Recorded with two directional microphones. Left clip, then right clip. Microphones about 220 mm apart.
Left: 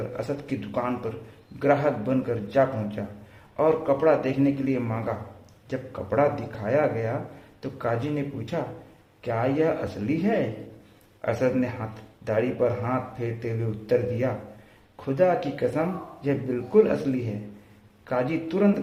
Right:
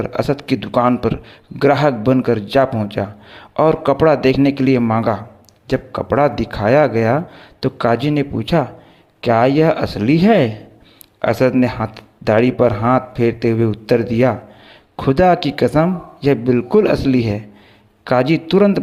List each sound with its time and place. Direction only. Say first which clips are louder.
0.1 s speech: right 12 dB; 40° right (ahead or behind)